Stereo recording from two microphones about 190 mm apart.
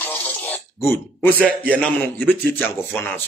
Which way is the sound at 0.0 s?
10° left (ahead or behind).